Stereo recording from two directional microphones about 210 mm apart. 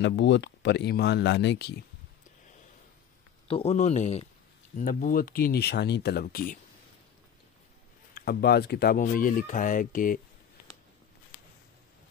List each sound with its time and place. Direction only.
0.0 s speech: 55° left (ahead or behind)
3.4 s speech: 30° left (ahead or behind)
8.1 s speech: 50° left (ahead or behind)